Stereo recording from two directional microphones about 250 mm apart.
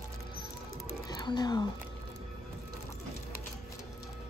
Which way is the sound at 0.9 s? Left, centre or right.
Centre.